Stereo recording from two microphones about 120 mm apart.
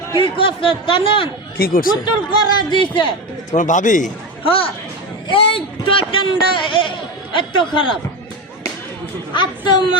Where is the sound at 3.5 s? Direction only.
90° left.